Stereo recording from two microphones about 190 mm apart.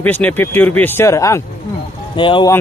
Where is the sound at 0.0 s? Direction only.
10° left (ahead or behind).